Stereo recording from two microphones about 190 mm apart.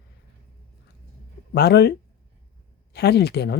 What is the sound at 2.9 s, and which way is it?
Speech, 60° left (ahead or behind).